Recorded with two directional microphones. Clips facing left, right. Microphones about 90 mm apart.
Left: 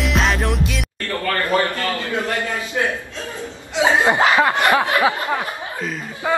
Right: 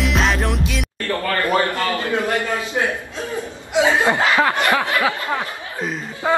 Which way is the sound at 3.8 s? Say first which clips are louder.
Left 3 dB; 20° left (ahead or behind).